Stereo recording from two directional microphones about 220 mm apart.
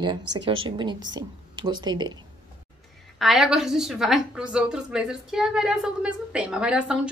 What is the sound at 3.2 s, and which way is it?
A woman's voice, centre (ahead or behind).